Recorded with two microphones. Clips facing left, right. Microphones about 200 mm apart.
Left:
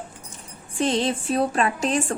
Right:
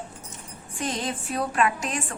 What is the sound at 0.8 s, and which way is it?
Speech, 30° left (ahead or behind).